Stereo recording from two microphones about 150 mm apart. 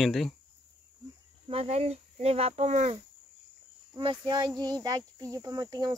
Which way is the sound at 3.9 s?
30° right (ahead or behind).